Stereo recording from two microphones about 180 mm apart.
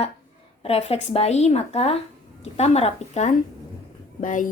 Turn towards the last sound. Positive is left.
turn(degrees=45)  # may be behind; listen again after turning